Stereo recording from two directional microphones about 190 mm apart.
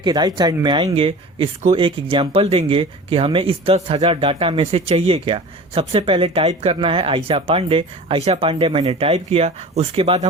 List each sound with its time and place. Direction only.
0.0 s speech: 20° right (ahead or behind)